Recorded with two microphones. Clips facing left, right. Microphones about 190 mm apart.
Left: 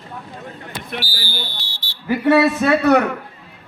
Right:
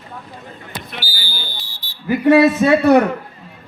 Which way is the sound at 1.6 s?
75° left (ahead or behind).